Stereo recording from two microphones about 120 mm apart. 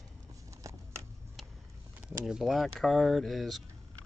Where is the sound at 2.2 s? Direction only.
5° right (ahead or behind).